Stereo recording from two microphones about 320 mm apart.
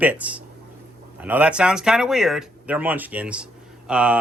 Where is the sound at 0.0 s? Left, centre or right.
Centre.